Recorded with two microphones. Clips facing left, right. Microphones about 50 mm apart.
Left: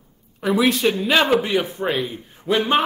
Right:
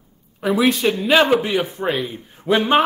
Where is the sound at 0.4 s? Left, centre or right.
Centre.